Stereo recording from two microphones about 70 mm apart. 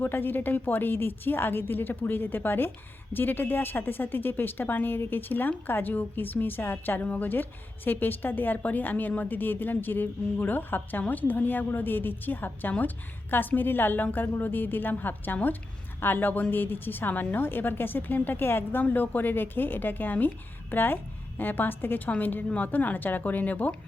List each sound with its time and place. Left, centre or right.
0.0 s a woman's voice: left